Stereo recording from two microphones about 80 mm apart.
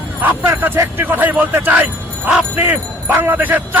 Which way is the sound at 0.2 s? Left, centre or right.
Right.